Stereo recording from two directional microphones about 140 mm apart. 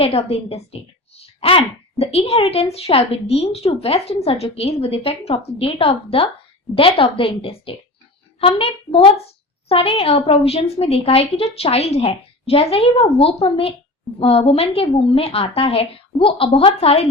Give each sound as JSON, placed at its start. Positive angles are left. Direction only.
{"t": 0.0, "sound": "a woman's voice", "side_deg": 45}